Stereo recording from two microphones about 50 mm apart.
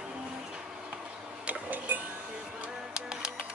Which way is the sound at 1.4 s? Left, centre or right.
Right.